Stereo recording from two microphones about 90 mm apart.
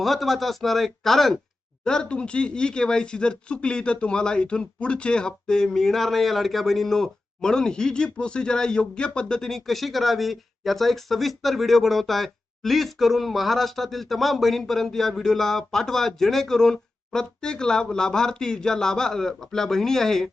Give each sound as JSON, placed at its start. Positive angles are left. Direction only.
{"t": 0.0, "sound": "speech", "side_deg": 0}